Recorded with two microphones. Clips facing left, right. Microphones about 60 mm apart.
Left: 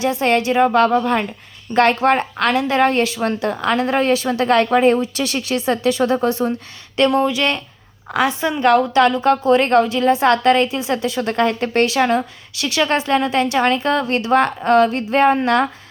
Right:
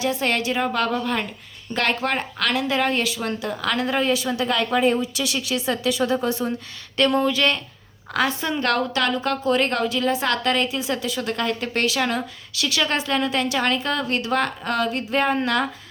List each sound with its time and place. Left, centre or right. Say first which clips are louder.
0.0 s a woman's voice: left 6 dB; left
3.6 s speech: left 5 dB; left
7.2 s a woman's voice: left 3 dB; left